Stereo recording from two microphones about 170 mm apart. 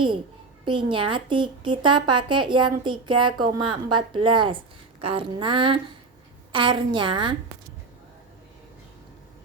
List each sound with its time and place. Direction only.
0.6 s a woman's voice: 30° right (ahead or behind)